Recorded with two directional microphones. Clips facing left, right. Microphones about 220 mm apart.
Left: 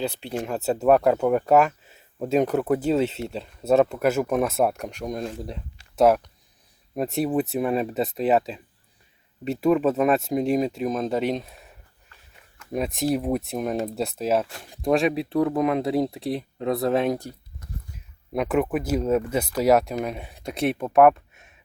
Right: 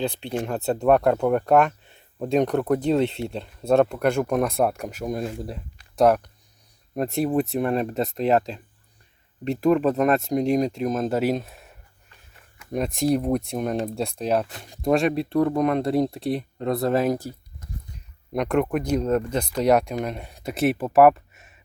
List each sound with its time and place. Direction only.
0.0 s speech: 5° left (ahead or behind)
12.7 s speech: centre (ahead or behind)